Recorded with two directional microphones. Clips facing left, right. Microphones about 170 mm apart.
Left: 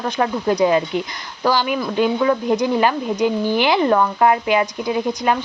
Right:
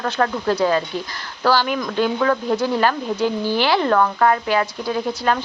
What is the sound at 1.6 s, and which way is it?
Speech, 5° left (ahead or behind).